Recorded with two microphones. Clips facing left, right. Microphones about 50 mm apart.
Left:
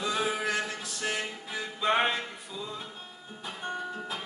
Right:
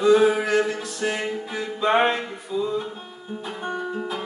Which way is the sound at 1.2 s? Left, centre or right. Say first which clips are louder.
Right 8 dB; centre.